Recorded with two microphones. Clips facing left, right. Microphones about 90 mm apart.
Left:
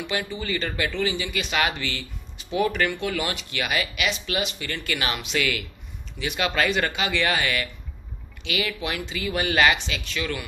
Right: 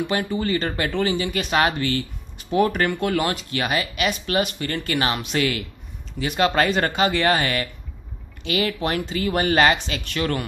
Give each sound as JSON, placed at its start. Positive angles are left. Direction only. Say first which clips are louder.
{"t": 0.0, "sound": "speech", "louder": "right 6 dB", "side_deg": -45}
{"t": 4.1, "sound": "speech", "louder": "right 5 dB", "side_deg": -45}
{"t": 10.0, "sound": "speech", "louder": "right 6 dB", "side_deg": -50}